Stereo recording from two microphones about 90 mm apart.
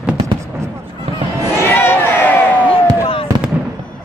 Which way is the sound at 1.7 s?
25° left (ahead or behind).